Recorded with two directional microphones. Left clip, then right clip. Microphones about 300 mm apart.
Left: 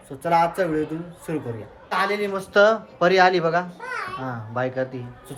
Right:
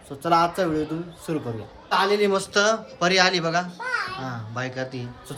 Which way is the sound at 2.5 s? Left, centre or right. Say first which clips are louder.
Left 8 dB; centre.